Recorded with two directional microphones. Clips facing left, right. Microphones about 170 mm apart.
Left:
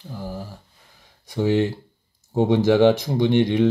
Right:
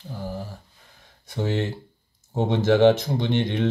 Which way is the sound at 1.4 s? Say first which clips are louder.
Left 6 dB; 10° left (ahead or behind).